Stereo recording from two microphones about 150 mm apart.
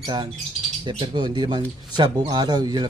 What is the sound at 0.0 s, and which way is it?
A man's voice, 30° right (ahead or behind).